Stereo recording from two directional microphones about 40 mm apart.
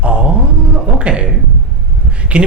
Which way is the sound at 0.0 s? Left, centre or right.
Right.